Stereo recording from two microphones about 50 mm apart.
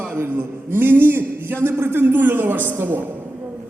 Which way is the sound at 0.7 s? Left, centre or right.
Right.